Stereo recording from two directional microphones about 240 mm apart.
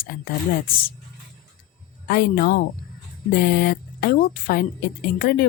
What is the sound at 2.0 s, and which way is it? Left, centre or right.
Speech, left.